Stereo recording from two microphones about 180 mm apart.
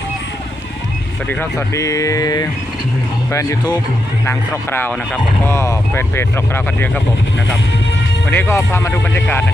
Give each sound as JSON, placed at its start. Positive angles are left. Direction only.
{"t": 1.3, "sound": "speech", "side_deg": 10}
{"t": 4.3, "sound": "speech", "side_deg": 10}
{"t": 8.3, "sound": "speech", "side_deg": 10}